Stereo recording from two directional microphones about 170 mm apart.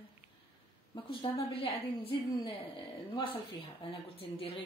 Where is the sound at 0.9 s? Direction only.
25° left (ahead or behind).